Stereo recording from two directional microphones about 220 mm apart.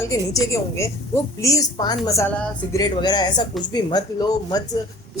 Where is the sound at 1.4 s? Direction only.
15° left (ahead or behind).